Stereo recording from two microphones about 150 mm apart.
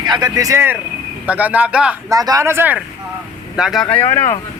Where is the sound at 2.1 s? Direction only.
25° right (ahead or behind); by 3.8 s 5° right (ahead or behind).